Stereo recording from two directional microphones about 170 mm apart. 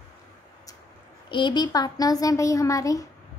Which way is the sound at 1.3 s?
25° left (ahead or behind).